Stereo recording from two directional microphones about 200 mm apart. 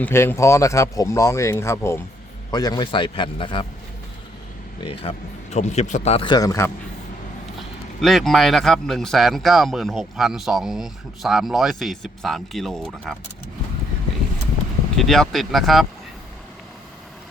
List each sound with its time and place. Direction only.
0.0 s speech: 10° left (ahead or behind)
4.8 s speech: 30° left (ahead or behind)
8.0 s speech: centre (ahead or behind)
14.9 s speech: centre (ahead or behind)